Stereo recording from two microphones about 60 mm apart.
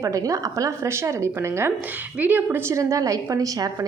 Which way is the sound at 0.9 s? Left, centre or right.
Right.